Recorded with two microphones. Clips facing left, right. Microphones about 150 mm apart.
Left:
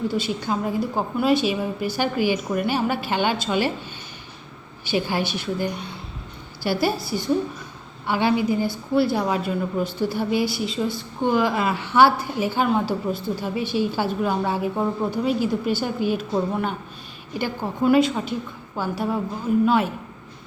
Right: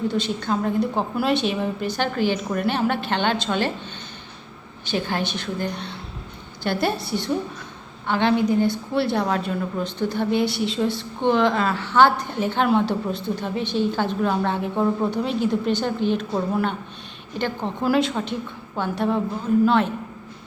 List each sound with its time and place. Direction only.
0.1 s a woman's voice: 5° left (ahead or behind)
4.9 s a woman's voice: 10° left (ahead or behind)